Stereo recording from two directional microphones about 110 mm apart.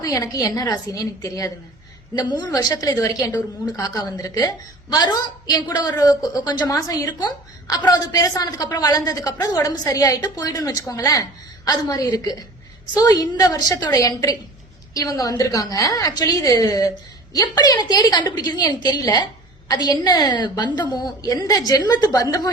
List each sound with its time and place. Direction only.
0.0 s speech: 30° left (ahead or behind)